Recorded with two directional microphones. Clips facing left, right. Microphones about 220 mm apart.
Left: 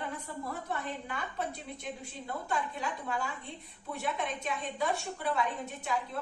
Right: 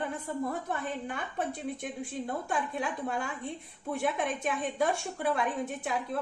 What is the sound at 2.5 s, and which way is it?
A woman's voice, 50° right (ahead or behind).